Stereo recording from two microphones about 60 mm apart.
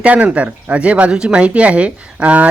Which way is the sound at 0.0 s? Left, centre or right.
Right.